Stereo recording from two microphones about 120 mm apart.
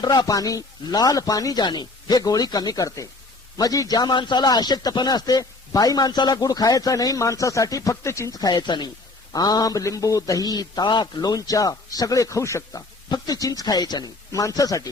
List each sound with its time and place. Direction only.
0.0 s a man's voice: 35° left (ahead or behind)